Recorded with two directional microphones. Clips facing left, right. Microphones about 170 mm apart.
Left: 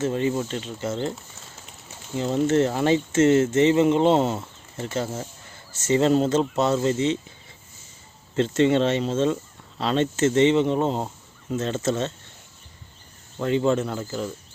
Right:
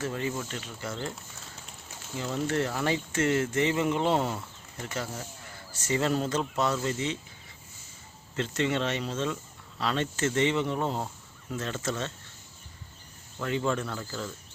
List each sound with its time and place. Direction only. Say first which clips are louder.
0.0 s speech: left 8 dB; 25° left (ahead or behind)
2.1 s speech: left 9 dB; 25° left (ahead or behind)
8.4 s speech: left 9 dB; 30° left (ahead or behind)
13.4 s speech: left 8 dB; 25° left (ahead or behind)